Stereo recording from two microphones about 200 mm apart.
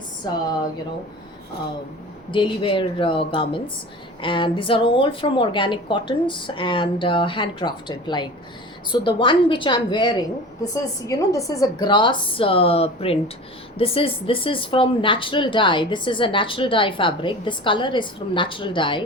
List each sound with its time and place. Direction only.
0.2 s speech: 20° left (ahead or behind)
2.3 s speech: 25° left (ahead or behind)